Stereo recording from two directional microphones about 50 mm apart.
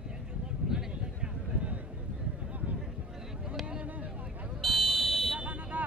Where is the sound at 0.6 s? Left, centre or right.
Centre.